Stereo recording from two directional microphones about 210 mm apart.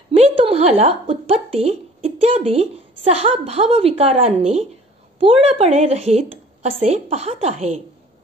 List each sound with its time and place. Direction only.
0.1 s a woman's voice: 30° right (ahead or behind)